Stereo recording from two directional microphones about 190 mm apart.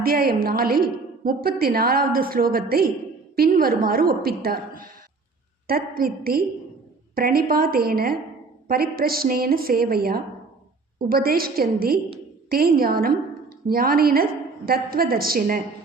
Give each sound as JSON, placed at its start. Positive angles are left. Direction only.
{"t": 0.0, "sound": "a woman's voice", "side_deg": -55}